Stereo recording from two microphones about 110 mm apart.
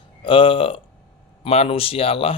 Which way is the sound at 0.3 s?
55° left (ahead or behind).